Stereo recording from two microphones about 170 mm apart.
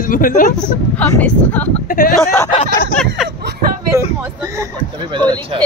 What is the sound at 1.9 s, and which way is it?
Speech, 60° left (ahead or behind).